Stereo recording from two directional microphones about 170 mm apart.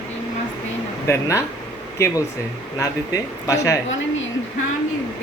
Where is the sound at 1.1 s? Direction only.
15° left (ahead or behind).